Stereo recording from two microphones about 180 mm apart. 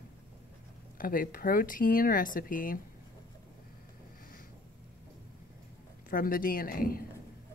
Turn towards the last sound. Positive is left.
turn(degrees=55)  # may be behind; listen again after turning